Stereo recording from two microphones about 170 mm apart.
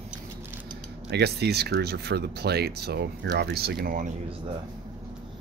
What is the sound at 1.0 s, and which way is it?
Speech, 75° right (ahead or behind).